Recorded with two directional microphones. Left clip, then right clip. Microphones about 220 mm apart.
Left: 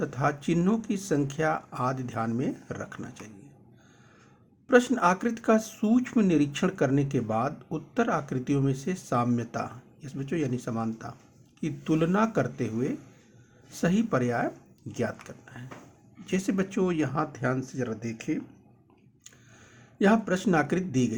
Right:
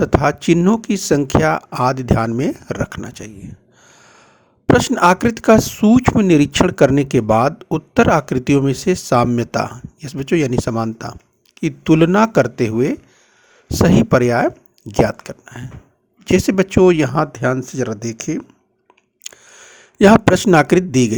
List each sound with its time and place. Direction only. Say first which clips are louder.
0.0 s speech: right 13 dB; 40° right (ahead or behind)
3.8 s gasp: right 16 dB; 45° right (ahead or behind)
4.6 s speech: right 10 dB; 45° right (ahead or behind)
19.2 s a sound: right 17 dB; 45° right (ahead or behind)